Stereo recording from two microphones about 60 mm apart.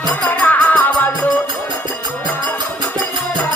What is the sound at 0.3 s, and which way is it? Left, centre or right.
Music, left.